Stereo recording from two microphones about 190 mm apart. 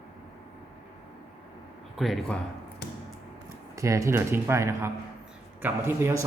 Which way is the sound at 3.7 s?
15° right (ahead or behind).